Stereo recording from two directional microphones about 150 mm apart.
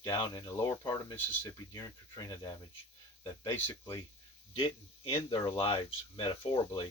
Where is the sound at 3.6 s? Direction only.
25° left (ahead or behind).